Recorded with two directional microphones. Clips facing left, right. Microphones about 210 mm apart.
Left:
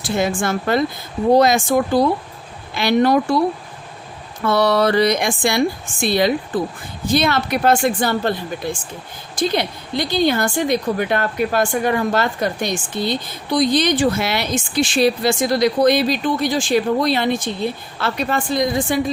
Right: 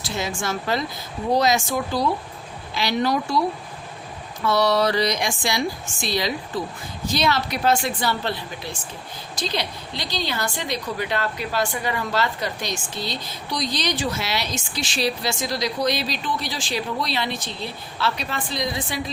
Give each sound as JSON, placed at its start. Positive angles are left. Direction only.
{"t": 0.0, "sound": "a woman's voice", "side_deg": 55}
{"t": 4.4, "sound": "a woman's voice", "side_deg": 55}